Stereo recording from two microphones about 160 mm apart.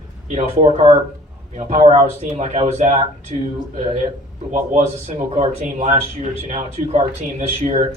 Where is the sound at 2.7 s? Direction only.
45° right (ahead or behind).